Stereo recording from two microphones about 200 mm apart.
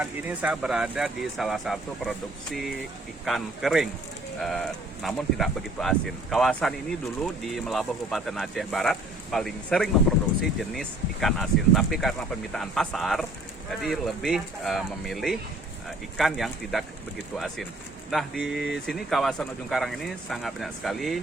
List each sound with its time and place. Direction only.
0.0 s speech: 10° right (ahead or behind)